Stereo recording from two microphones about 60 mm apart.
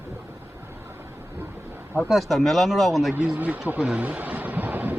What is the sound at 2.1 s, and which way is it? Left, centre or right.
Speech, centre.